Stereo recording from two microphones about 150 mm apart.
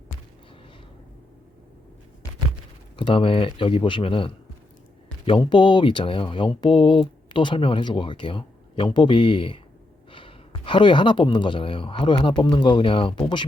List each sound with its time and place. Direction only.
2.9 s speech: 35° left (ahead or behind)
5.5 s speech: 30° left (ahead or behind)